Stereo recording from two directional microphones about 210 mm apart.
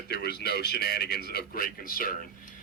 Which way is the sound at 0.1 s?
50° left (ahead or behind).